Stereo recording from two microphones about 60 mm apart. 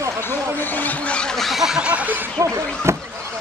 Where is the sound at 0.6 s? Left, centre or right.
Left.